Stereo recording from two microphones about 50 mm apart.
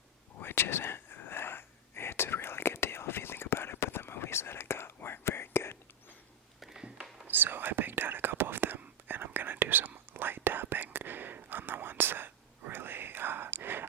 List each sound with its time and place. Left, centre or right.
0.3 s whispering: left
6.6 s a sound: centre
7.3 s whispering: right